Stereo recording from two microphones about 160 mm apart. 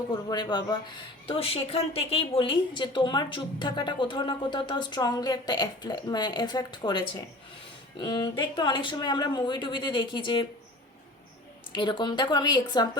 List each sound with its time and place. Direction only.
0.1 s a woman's voice: 25° left (ahead or behind)
1.3 s a woman's voice: 35° left (ahead or behind)
11.7 s a woman's voice: 30° left (ahead or behind)